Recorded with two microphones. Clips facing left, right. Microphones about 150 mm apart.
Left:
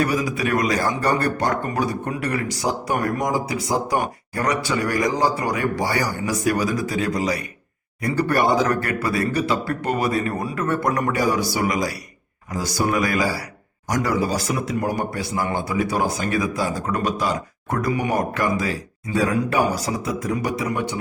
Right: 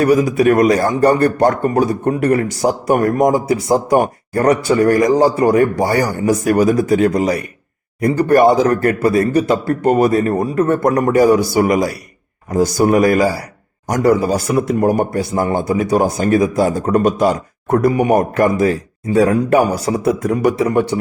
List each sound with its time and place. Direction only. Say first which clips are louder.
0.0 s a man's voice: right 10 dB; 50° right (ahead or behind)